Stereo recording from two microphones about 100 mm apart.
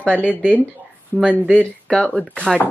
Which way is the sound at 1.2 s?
10° left (ahead or behind).